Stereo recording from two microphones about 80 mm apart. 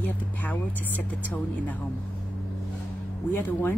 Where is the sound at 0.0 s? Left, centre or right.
Left.